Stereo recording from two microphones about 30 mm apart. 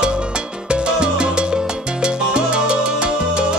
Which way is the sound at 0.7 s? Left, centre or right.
Right.